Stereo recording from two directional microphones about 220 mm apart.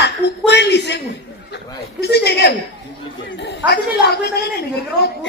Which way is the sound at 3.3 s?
50° left (ahead or behind).